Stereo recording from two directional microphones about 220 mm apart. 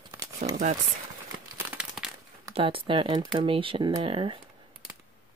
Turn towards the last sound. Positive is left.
turn(degrees=-25)  # may be behind; listen again after turning